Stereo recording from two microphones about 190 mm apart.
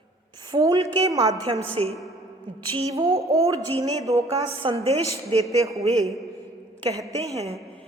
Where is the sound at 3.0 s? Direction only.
15° right (ahead or behind).